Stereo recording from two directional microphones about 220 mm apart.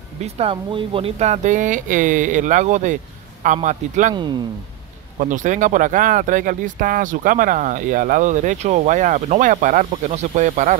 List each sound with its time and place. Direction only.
0.2 s speech: 25° right (ahead or behind)
5.2 s speech: 35° right (ahead or behind)